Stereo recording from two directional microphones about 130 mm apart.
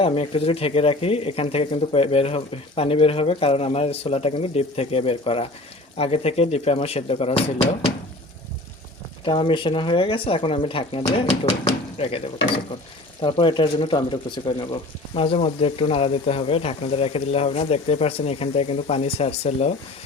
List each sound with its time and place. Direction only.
0.0 s speech: 45° left (ahead or behind)
9.2 s speech: 40° left (ahead or behind)
11.2 s speech: 60° left (ahead or behind)